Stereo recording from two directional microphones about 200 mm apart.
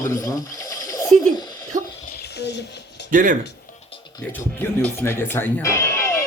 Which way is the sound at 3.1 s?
40° right (ahead or behind).